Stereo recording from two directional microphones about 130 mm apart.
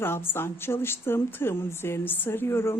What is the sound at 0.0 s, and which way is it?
A woman's voice, 15° left (ahead or behind).